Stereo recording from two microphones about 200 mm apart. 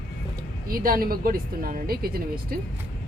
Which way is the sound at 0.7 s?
45° right (ahead or behind).